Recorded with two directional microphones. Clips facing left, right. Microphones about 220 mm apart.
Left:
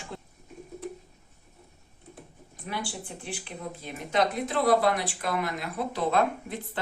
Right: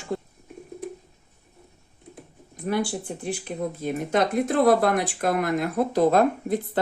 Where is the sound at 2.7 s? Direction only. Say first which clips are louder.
Right 10 dB; 45° right (ahead or behind).